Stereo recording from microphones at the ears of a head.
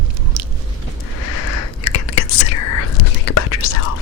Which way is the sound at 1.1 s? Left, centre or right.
Left.